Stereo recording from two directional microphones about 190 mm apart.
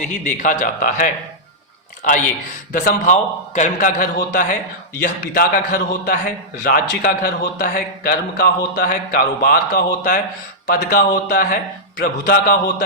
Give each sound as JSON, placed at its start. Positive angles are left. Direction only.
{"t": 0.1, "sound": "a man's voice", "side_deg": 45}
{"t": 2.7, "sound": "a man's voice", "side_deg": 45}